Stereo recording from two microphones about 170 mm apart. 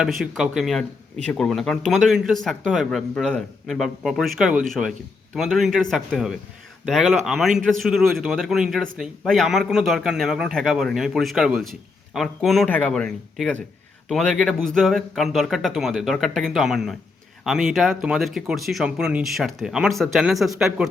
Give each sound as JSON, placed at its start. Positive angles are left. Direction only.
{"t": 0.0, "sound": "speech", "side_deg": 0}